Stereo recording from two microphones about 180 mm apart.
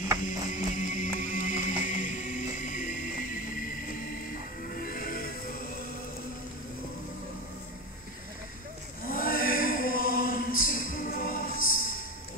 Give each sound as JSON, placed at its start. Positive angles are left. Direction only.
{"t": 0.2, "sound": "music", "side_deg": 40}
{"t": 4.7, "sound": "music", "side_deg": 50}
{"t": 9.0, "sound": "a sound", "side_deg": 55}